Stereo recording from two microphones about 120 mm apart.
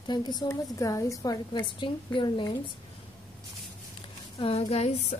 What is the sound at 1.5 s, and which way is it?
A woman's voice, 40° left (ahead or behind).